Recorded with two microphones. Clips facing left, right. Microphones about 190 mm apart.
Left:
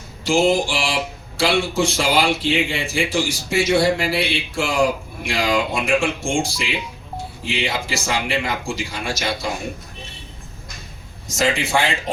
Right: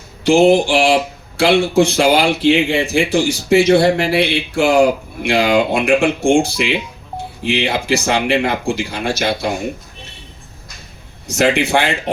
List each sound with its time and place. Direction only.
0.3 s a man's voice: 65° right (ahead or behind)
11.3 s a man's voice: 65° right (ahead or behind)